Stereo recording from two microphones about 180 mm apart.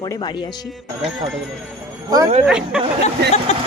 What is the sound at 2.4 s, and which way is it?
Speech, 5° right (ahead or behind).